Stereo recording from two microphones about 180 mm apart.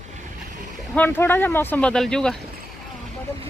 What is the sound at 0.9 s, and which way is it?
Speech, 10° left (ahead or behind).